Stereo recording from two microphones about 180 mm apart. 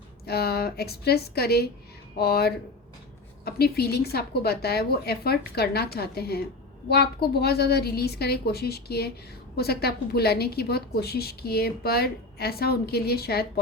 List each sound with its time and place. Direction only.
0.3 s a woman's voice: 60° left (ahead or behind)